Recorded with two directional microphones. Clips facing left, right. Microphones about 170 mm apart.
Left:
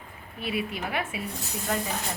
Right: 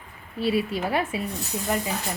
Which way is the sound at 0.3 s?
30° right (ahead or behind).